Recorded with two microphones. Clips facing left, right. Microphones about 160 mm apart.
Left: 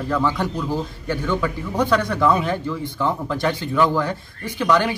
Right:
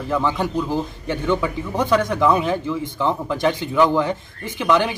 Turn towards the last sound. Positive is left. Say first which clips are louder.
# even
turn(degrees=-15)  # may be behind; listen again after turning